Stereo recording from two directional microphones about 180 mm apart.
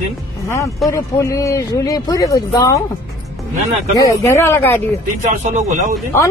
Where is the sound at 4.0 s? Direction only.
15° left (ahead or behind).